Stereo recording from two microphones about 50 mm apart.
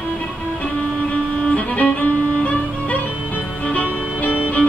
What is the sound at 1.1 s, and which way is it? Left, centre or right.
Music, left.